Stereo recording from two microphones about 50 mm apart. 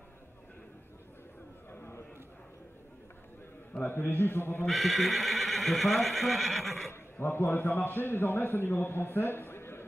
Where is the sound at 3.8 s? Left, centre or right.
Left.